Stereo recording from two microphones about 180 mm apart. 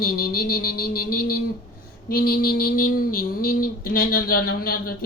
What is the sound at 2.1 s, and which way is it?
Mantra, 55° left (ahead or behind).